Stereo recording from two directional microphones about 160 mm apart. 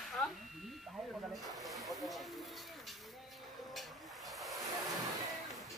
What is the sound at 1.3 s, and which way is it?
Speech, centre (ahead or behind).